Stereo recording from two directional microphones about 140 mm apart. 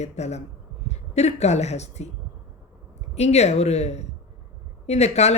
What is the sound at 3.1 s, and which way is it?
Speech, 50° left (ahead or behind).